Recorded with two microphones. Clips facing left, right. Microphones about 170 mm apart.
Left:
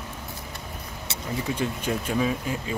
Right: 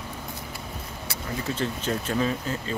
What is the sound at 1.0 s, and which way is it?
Speech, 15° left (ahead or behind).